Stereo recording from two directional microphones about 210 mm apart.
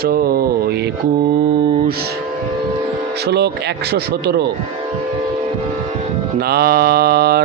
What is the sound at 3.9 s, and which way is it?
Mantra, 50° right (ahead or behind).